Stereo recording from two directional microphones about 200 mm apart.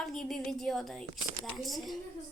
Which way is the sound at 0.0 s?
Centre (ahead or behind).